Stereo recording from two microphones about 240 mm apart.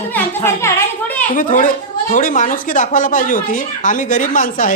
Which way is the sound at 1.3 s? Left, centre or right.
Left.